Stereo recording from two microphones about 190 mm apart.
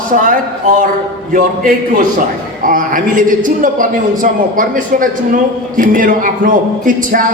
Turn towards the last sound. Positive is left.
turn(degrees=-45)  # may be behind; listen again after turning